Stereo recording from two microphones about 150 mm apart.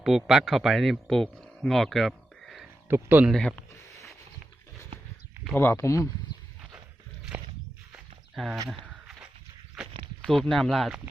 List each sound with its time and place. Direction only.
0.0 s a man's voice: 5° right (ahead or behind)
2.9 s speech: 10° right (ahead or behind)
3.3 s speech: 5° left (ahead or behind)
5.5 s speech: 15° left (ahead or behind)
7.9 s walk: centre (ahead or behind)
8.8 s a sound: 5° right (ahead or behind)
10.2 s speech: 5° left (ahead or behind)